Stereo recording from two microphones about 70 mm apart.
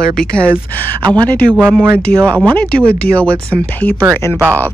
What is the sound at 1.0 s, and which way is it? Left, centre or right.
Speech, right.